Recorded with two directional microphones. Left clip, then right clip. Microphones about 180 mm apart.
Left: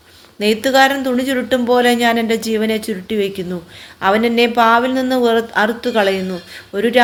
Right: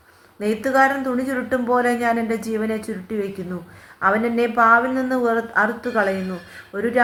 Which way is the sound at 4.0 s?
55° left (ahead or behind).